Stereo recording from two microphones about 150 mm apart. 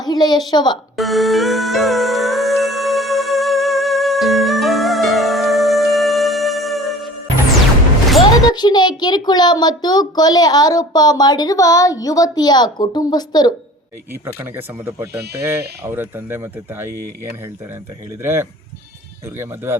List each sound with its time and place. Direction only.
0.0 s a woman's voice: 30° left (ahead or behind)
0.9 s music: centre (ahead or behind)
8.4 s a child's voice: 30° left (ahead or behind)
14.3 s speech: 15° right (ahead or behind)
18.2 s speech: 15° right (ahead or behind)